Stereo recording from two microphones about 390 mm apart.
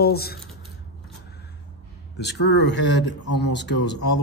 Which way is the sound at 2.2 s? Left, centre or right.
Left.